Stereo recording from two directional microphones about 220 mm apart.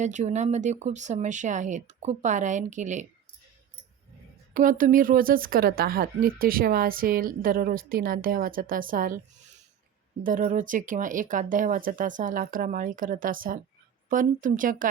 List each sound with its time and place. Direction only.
0.0 s speech: 35° right (ahead or behind)
4.5 s speech: 40° right (ahead or behind)
10.2 s speech: 40° right (ahead or behind)